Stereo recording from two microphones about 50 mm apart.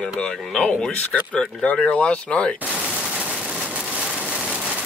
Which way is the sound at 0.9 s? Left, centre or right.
Left.